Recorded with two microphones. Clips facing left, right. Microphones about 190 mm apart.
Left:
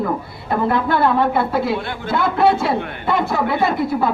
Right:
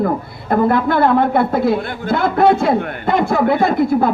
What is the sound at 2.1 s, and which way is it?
A woman's voice, 50° right (ahead or behind).